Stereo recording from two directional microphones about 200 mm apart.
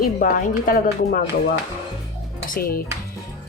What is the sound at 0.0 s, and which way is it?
Speech, 40° left (ahead or behind).